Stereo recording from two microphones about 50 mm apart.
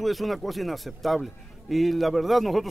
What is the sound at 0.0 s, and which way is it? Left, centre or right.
A man's voice, centre.